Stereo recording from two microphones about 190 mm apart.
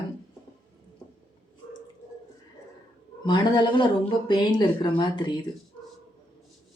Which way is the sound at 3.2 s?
25° left (ahead or behind).